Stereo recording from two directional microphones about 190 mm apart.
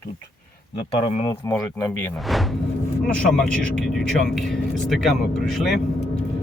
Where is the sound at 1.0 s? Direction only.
30° left (ahead or behind).